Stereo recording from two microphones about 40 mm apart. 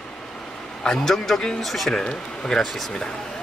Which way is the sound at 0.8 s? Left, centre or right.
Left.